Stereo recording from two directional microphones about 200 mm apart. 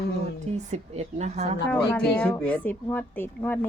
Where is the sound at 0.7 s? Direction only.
35° right (ahead or behind).